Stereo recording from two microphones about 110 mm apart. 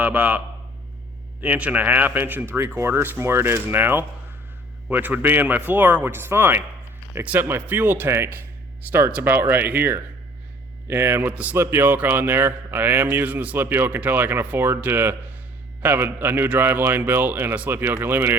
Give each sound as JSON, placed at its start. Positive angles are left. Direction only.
{"t": 0.0, "sound": "a man's voice", "side_deg": -15}